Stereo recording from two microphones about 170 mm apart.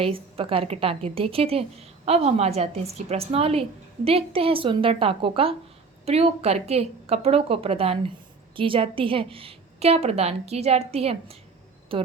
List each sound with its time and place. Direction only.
0.0 s a woman's voice: 35° right (ahead or behind)